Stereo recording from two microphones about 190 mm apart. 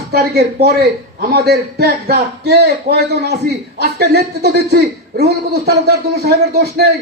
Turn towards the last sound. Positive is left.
turn(degrees=-55)  # may be behind; listen again after turning